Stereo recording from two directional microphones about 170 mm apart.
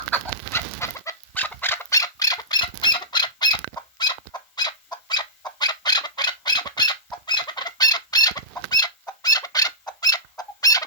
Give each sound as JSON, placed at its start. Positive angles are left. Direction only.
{"t": 0.1, "sound": "chicken", "side_deg": 15}